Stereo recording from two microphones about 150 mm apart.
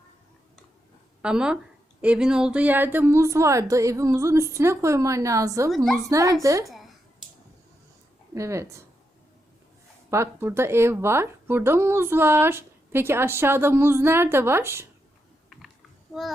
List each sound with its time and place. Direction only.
1.2 s a woman's voice: 5° right (ahead or behind)
5.7 s a woman's voice: centre (ahead or behind)
6.0 s a woman's voice: 20° right (ahead or behind)
6.7 s a sound: centre (ahead or behind)
8.3 s speech: 20° right (ahead or behind)
10.1 s speech: 20° right (ahead or behind)
16.1 s a woman's voice: centre (ahead or behind)